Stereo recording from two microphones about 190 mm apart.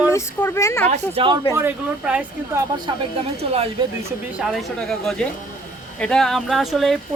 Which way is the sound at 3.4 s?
35° right (ahead or behind).